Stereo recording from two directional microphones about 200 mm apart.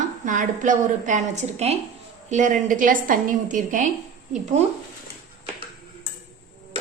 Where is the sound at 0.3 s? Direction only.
40° right (ahead or behind).